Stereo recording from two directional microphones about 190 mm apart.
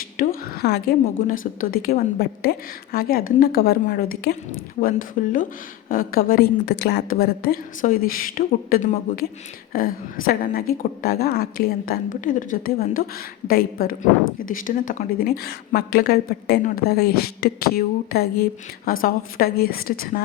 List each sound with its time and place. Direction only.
0.4 s a woman's voice: 55° left (ahead or behind)